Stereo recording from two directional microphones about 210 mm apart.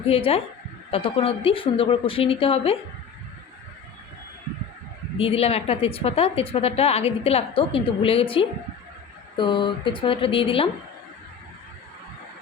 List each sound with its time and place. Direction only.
0.1 s a woman's voice: 30° left (ahead or behind)
5.2 s a woman's voice: 25° left (ahead or behind)